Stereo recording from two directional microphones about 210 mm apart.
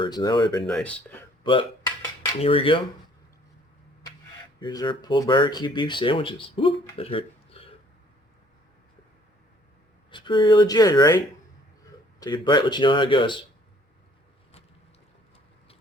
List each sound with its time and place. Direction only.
0.0 s speech: 20° left (ahead or behind)
0.7 s speech: 5° left (ahead or behind)
1.5 s speech: 25° left (ahead or behind)
4.6 s speech: 20° left (ahead or behind)
10.1 s speech: 20° left (ahead or behind)
12.2 s speech: 20° left (ahead or behind)